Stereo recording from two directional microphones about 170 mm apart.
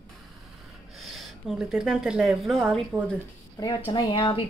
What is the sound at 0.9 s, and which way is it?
A woman's voice, centre (ahead or behind).